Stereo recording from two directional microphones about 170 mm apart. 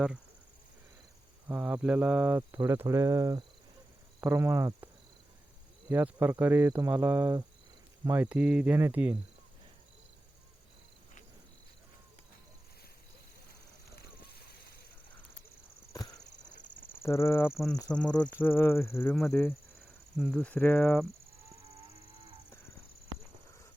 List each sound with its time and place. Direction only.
1.5 s speech: 10° right (ahead or behind)
5.9 s speech: 10° right (ahead or behind)
17.0 s speech: 15° left (ahead or behind)
19.1 s speech: 5° left (ahead or behind)